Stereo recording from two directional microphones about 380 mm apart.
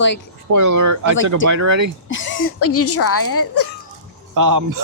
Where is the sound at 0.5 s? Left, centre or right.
Right.